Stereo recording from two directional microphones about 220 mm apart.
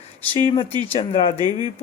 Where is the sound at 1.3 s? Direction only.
20° right (ahead or behind).